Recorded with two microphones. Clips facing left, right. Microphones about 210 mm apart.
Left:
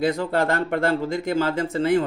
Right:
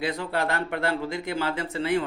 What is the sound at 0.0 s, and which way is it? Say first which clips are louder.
Speech: left 6 dB; 45° left (ahead or behind).